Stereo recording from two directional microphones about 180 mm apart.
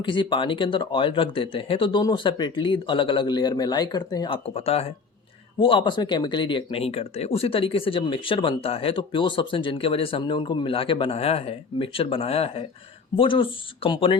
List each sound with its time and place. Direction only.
0.0 s speech: 25° left (ahead or behind)